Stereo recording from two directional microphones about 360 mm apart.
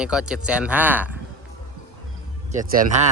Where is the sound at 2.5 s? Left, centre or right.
Right.